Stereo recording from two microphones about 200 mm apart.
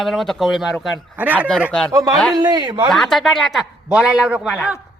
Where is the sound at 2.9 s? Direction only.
Centre (ahead or behind).